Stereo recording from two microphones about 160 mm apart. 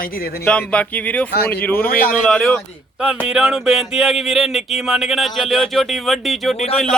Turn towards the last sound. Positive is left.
turn(degrees=0)  # may be behind; listen again after turning